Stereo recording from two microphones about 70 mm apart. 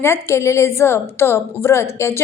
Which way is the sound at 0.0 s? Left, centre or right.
Left.